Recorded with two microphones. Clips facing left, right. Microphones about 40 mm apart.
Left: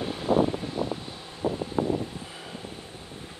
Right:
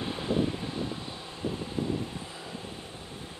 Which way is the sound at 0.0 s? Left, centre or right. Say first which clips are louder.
Left 2 dB; centre.